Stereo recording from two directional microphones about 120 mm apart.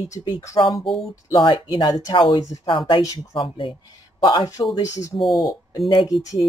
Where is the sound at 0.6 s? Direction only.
45° left (ahead or behind).